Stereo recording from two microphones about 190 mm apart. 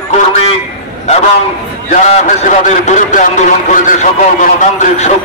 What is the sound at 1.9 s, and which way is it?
A man's voice, 35° left (ahead or behind).